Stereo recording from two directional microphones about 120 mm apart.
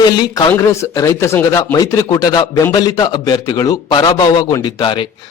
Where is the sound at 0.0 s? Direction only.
30° left (ahead or behind).